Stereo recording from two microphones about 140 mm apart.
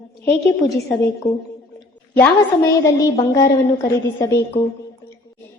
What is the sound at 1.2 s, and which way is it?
A woman's voice, 20° left (ahead or behind).